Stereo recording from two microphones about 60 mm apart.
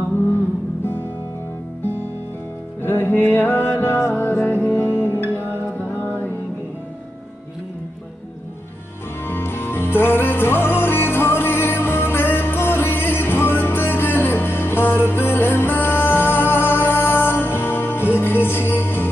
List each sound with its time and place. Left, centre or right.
2.8 s music: left
9.2 s music: left